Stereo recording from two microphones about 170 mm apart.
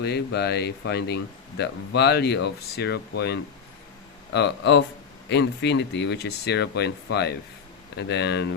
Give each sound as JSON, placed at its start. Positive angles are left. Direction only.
{"t": 0.0, "sound": "speech", "side_deg": 75}